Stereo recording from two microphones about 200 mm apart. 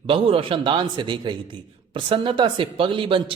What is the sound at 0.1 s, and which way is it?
A man's voice, 25° right (ahead or behind).